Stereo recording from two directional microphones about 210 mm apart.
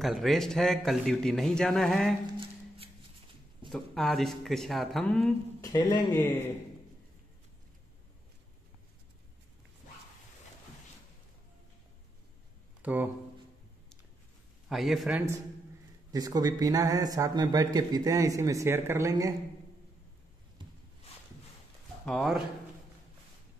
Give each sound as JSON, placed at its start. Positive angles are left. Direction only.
{"t": 0.0, "sound": "a man's voice", "side_deg": 0}
{"t": 3.6, "sound": "a man's voice", "side_deg": 0}
{"t": 5.6, "sound": "speech", "side_deg": 15}
{"t": 12.8, "sound": "speech", "side_deg": -10}
{"t": 14.7, "sound": "a man's voice", "side_deg": 0}
{"t": 16.1, "sound": "speech", "side_deg": -20}
{"t": 22.0, "sound": "speech", "side_deg": 0}